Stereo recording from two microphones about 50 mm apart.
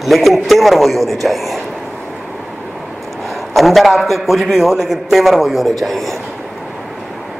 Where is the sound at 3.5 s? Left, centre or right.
Centre.